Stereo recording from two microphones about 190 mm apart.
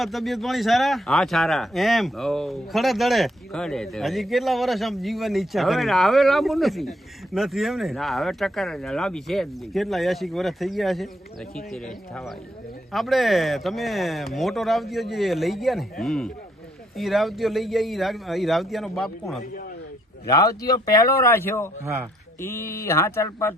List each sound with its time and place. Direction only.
0.0 s a man's voice: centre (ahead or behind)
20.2 s speech: 20° left (ahead or behind)